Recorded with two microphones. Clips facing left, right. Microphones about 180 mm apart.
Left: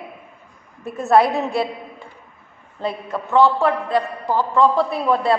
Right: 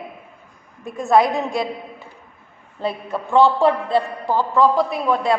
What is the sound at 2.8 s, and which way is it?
Speech, 5° right (ahead or behind).